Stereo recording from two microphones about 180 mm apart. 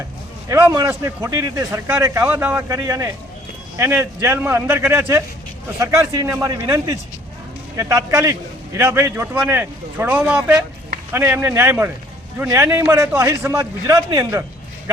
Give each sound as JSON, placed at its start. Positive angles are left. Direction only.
{"t": 0.4, "sound": "a man's voice", "side_deg": -15}